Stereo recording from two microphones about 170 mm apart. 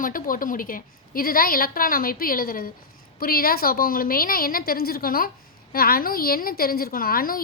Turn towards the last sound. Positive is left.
turn(degrees=60)  # may be behind; listen again after turning